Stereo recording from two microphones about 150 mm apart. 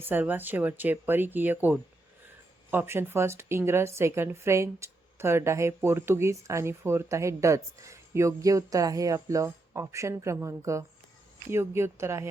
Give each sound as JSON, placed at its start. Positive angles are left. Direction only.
{"t": 0.0, "sound": "a woman's voice", "side_deg": -15}